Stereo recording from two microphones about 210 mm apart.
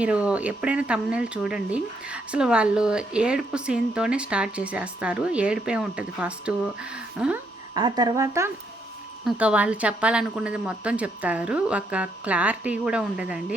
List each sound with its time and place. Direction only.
0.0 s speech: 5° right (ahead or behind)
7.7 s speech: 20° right (ahead or behind); by 13.4 s 5° right (ahead or behind)